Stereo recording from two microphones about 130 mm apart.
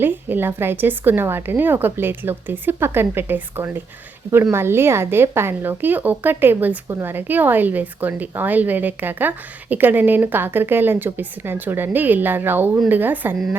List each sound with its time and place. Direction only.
0.0 s a woman's voice: 15° right (ahead or behind)